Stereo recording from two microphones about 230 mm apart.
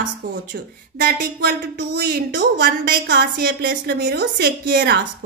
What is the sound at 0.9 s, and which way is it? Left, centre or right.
A woman's voice, right.